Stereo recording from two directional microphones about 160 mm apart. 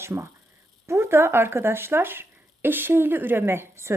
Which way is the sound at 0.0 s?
15° right (ahead or behind).